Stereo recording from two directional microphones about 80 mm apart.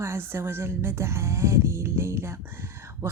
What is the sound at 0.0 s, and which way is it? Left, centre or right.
Speech, right.